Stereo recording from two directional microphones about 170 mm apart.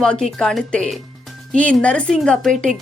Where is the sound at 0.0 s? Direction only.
5° left (ahead or behind).